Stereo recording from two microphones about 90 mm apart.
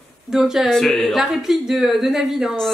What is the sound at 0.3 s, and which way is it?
A woman's voice, 5° right (ahead or behind).